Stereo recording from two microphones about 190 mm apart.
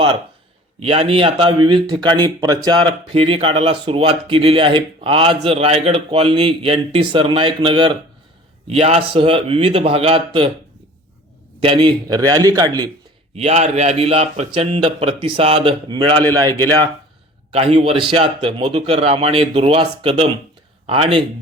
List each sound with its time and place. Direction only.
0.8 s a man's voice: 30° right (ahead or behind)
11.6 s a man's voice: 30° right (ahead or behind)
13.3 s a man's voice: 35° right (ahead or behind)
17.5 s a man's voice: 30° right (ahead or behind)